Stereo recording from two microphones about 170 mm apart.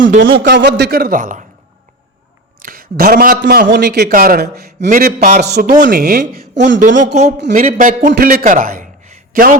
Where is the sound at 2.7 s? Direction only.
60° right (ahead or behind).